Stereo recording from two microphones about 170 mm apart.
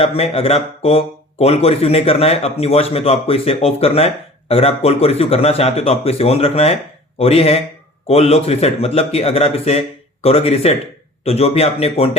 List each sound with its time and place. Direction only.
0.0 s speech: 35° left (ahead or behind)